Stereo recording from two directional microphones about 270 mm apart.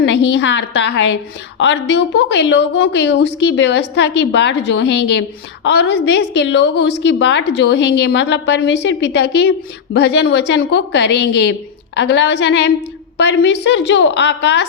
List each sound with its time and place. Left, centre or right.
0.0 s a woman's voice: left